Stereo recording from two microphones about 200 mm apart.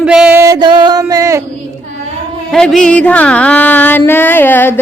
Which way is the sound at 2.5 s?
Centre (ahead or behind).